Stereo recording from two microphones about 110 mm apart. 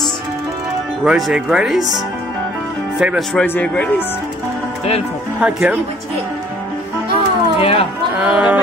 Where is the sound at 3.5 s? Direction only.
15° left (ahead or behind).